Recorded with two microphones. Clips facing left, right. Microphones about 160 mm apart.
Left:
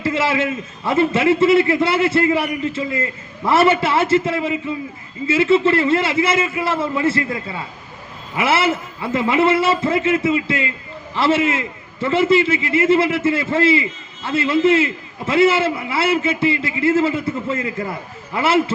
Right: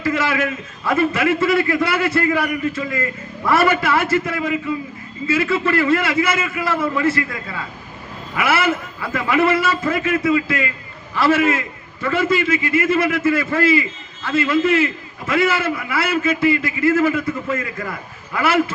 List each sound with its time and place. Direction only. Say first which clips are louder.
0.0 s a man's voice: left 1 dB; 25° left (ahead or behind)